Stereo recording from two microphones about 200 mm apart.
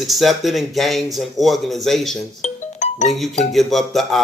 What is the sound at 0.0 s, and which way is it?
A man's voice, centre (ahead or behind).